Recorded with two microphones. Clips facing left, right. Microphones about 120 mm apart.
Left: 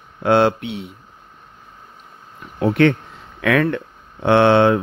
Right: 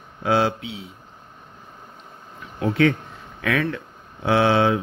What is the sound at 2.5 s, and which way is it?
Speech, 60° left (ahead or behind).